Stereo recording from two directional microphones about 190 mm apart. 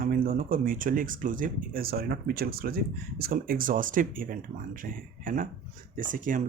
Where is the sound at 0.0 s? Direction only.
45° right (ahead or behind).